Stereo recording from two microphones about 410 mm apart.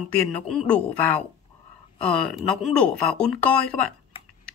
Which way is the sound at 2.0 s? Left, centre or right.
Centre.